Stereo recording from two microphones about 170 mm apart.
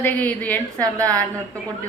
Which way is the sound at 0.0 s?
10° left (ahead or behind).